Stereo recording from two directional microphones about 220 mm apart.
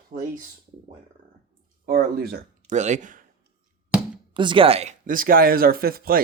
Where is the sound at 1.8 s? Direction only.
45° right (ahead or behind).